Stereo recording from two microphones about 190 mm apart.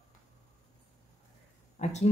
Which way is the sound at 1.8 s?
40° left (ahead or behind).